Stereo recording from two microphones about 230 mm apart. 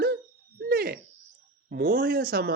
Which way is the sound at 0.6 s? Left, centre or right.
Right.